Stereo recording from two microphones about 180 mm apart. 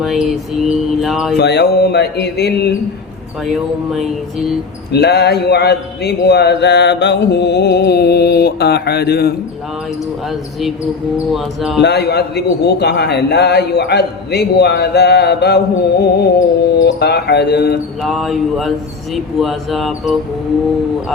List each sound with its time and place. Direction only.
0.0 s speech: centre (ahead or behind)
1.4 s mantra: 70° left (ahead or behind)
3.4 s speech: centre (ahead or behind)
4.9 s a man's voice: 65° left (ahead or behind)
11.8 s a man's voice: 65° left (ahead or behind)
18.0 s speech: centre (ahead or behind)